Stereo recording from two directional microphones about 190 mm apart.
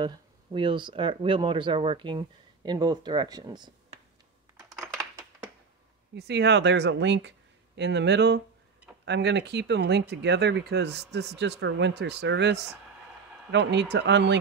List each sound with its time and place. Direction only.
0.0 s speech: 25° right (ahead or behind)
6.1 s speech: 60° right (ahead or behind)